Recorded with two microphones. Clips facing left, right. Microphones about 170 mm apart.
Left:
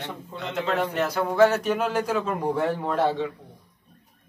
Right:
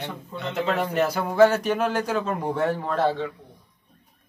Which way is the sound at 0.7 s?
5° right (ahead or behind).